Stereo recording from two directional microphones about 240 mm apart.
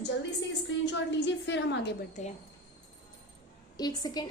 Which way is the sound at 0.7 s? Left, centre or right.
Left.